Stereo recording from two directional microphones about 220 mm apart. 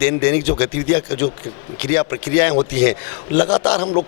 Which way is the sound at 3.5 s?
10° left (ahead or behind).